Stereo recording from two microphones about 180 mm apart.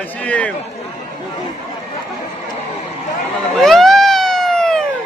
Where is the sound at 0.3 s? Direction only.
5° left (ahead or behind).